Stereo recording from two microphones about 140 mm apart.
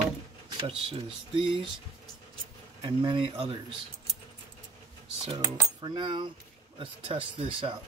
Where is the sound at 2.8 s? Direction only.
35° right (ahead or behind).